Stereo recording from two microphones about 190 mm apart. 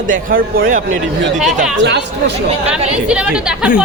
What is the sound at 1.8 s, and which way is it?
Speech, 65° right (ahead or behind).